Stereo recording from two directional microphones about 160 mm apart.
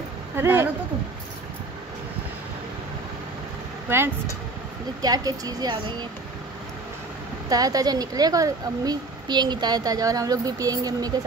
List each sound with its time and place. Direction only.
0.4 s speech: 15° right (ahead or behind)
3.9 s speech: 15° right (ahead or behind)
7.4 s speech: 25° right (ahead or behind)